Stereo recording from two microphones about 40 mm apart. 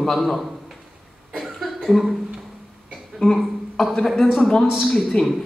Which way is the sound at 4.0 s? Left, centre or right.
Centre.